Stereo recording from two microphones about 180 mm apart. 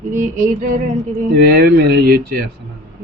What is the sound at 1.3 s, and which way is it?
Speech, 60° right (ahead or behind).